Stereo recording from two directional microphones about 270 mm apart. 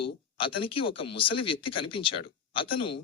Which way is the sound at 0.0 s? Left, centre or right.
Centre.